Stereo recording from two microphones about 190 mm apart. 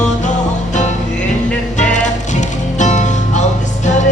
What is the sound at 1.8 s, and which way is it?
Music, 40° left (ahead or behind).